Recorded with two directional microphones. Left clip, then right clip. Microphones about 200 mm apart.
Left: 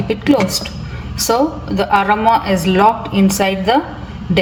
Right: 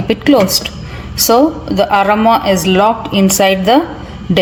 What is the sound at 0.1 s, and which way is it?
A woman's voice, 45° right (ahead or behind).